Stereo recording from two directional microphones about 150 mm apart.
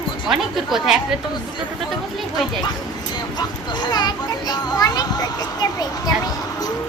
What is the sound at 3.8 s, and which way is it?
A child's voice, 30° left (ahead or behind).